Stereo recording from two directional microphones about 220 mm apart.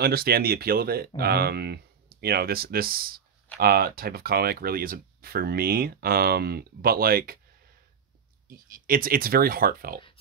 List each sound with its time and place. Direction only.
0.0 s speech: 45° right (ahead or behind)
8.5 s speech: 40° right (ahead or behind)